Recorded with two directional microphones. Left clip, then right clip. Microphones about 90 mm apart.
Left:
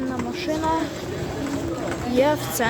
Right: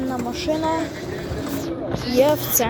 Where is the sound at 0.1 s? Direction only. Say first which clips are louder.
Right 3 dB; 10° left (ahead or behind).